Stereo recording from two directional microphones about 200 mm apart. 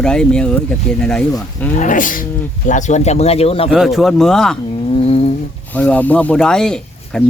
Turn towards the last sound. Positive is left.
turn(degrees=5)  # may be behind; listen again after turning